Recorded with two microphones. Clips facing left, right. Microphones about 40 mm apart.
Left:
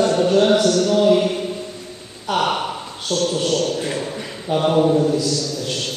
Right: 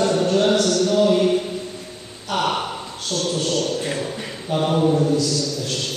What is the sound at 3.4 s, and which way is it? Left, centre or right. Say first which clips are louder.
Speech: left 3 dB; left.